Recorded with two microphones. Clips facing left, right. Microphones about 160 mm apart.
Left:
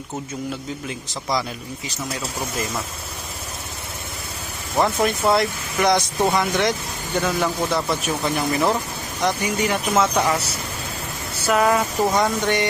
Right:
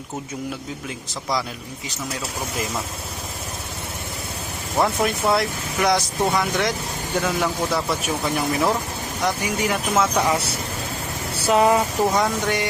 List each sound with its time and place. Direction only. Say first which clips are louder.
0.9 s speech: even; centre (ahead or behind)
4.8 s speech: left 1 dB; centre (ahead or behind)
11.4 s speech: right 1 dB; 25° right (ahead or behind)
12.1 s speech: left 1 dB; 5° right (ahead or behind)